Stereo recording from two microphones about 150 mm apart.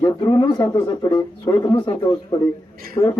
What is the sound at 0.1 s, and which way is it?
A man's voice, 30° left (ahead or behind).